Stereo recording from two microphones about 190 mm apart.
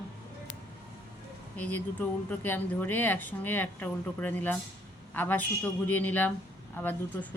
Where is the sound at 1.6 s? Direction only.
10° left (ahead or behind).